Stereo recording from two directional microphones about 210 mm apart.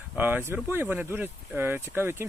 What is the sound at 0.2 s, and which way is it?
Speech, 10° right (ahead or behind).